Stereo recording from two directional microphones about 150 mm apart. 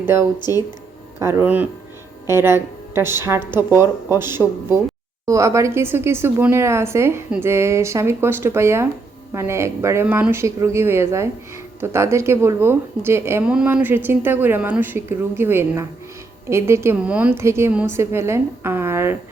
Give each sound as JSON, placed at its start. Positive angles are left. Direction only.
{"t": 0.0, "sound": "a woman's voice", "side_deg": -15}
{"t": 0.3, "sound": "speech", "side_deg": 25}
{"t": 1.2, "sound": "a woman's voice", "side_deg": -20}
{"t": 13.4, "sound": "a woman's voice", "side_deg": -5}